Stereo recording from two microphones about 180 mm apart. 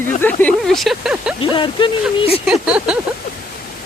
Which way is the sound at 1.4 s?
25° left (ahead or behind).